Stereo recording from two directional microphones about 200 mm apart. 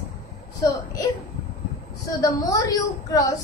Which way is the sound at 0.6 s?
15° left (ahead or behind).